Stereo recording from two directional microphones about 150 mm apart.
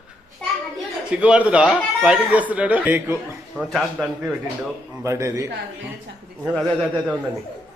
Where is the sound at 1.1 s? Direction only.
10° right (ahead or behind).